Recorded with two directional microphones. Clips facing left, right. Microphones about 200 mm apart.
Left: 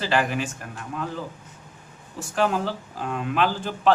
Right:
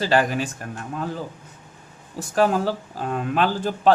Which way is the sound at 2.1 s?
40° right (ahead or behind).